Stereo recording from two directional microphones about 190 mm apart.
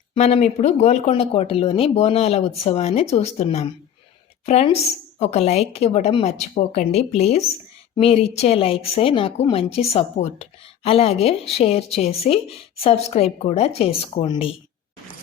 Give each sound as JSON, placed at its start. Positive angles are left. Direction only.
{"t": 0.1, "sound": "a woman's voice", "side_deg": 35}